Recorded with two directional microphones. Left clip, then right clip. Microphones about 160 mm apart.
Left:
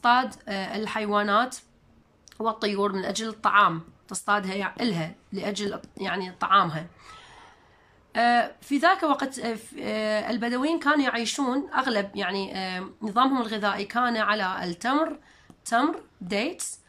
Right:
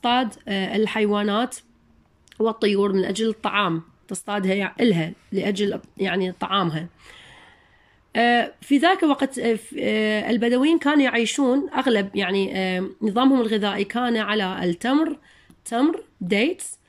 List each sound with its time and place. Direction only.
0.0 s a woman's voice: 15° right (ahead or behind)